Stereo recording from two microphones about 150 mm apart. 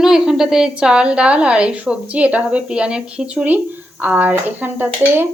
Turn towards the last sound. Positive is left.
turn(degrees=-15)  # may be behind; listen again after turning